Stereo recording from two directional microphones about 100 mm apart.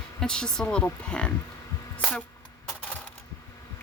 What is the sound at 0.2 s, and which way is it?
A woman's voice, 10° left (ahead or behind).